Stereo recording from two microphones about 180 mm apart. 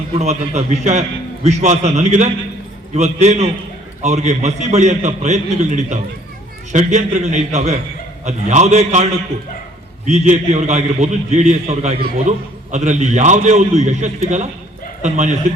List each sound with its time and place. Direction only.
0.2 s a man's voice: 35° right (ahead or behind)
10.1 s a man's voice: 40° right (ahead or behind)